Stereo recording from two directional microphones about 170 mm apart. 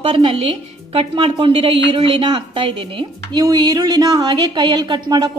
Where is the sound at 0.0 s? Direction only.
30° right (ahead or behind).